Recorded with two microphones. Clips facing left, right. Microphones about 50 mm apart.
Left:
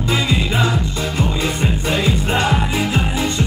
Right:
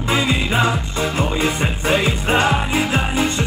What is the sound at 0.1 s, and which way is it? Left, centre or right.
Music, right.